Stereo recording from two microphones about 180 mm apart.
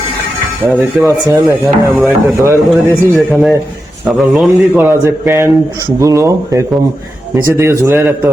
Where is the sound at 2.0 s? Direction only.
10° right (ahead or behind).